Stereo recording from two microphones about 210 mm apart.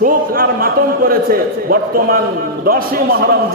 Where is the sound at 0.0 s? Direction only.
45° right (ahead or behind).